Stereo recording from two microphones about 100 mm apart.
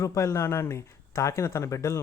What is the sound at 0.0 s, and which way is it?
A man's voice, 30° left (ahead or behind).